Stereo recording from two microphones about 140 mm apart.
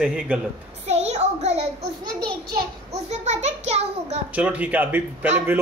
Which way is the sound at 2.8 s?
55° right (ahead or behind).